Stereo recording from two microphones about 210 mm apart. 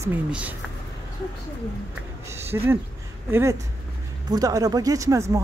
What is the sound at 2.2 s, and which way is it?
Speech, 10° right (ahead or behind).